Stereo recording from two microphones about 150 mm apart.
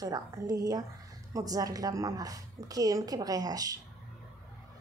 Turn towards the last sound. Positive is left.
turn(degrees=-25)  # may be behind; listen again after turning